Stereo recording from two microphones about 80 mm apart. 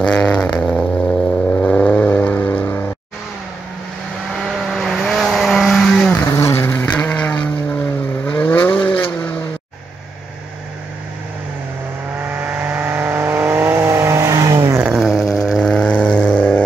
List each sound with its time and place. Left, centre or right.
0.0 s vehicle: centre
4.5 s vehicle: centre
6.3 s vehicle: left
6.9 s vehicle: centre
12.4 s vehicle: right
15.0 s dog: centre
15.7 s vehicle: centre